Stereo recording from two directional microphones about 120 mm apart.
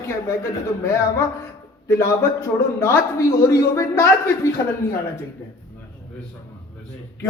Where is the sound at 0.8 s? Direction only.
25° left (ahead or behind).